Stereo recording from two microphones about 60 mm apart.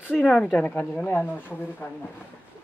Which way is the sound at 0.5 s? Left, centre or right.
Left.